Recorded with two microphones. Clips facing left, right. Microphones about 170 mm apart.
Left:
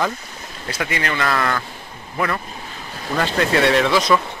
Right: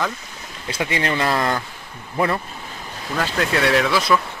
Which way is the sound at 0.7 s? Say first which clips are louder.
Right 2 dB; 25° right (ahead or behind).